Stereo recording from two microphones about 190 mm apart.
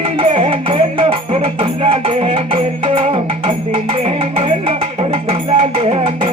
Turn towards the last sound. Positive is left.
turn(degrees=-30)  # may be behind; listen again after turning